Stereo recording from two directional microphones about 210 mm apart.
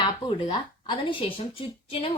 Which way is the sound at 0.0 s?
20° left (ahead or behind).